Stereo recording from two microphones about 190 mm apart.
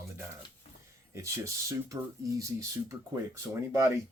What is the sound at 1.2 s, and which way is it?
Speech, 15° right (ahead or behind).